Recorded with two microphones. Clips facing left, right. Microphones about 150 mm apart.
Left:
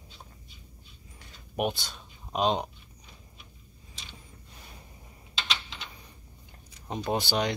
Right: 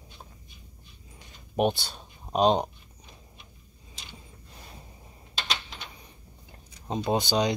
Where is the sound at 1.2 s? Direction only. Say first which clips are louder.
Right 5 dB; 30° right (ahead or behind).